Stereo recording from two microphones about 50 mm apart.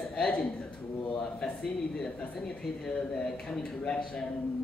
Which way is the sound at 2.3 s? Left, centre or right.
Centre.